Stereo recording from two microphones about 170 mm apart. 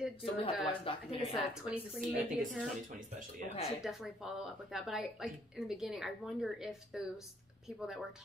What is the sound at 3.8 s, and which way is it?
A woman's voice, centre (ahead or behind).